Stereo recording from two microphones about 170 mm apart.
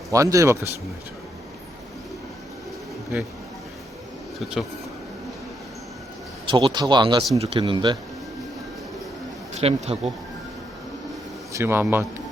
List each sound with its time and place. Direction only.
0.1 s speech: 20° right (ahead or behind)
6.5 s speech: 30° right (ahead or behind)
7.3 s speech: 35° right (ahead or behind)
7.6 s speech: 25° right (ahead or behind)
9.6 s speech: 40° right (ahead or behind)
11.5 s a man's voice: 15° right (ahead or behind)